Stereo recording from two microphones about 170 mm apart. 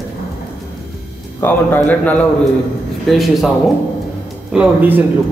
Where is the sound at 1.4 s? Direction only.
10° left (ahead or behind).